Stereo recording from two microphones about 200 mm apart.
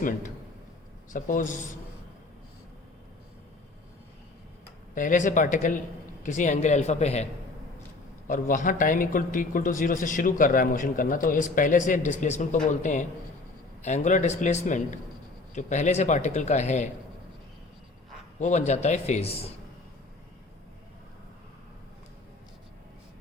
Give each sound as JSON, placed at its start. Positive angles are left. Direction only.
{"t": 1.1, "sound": "speech", "side_deg": 40}
{"t": 4.9, "sound": "speech", "side_deg": 40}
{"t": 8.3, "sound": "speech", "side_deg": 40}
{"t": 18.3, "sound": "speech", "side_deg": 35}